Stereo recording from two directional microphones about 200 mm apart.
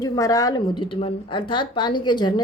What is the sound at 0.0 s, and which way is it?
A woman's voice, 15° left (ahead or behind).